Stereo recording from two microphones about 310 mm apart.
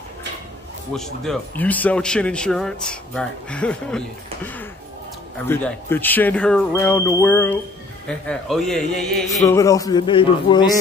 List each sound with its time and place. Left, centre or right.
0.9 s a man's voice: centre
5.5 s a man's voice: centre